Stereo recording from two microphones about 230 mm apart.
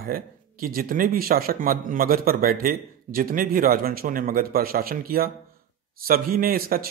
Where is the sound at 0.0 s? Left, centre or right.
Right.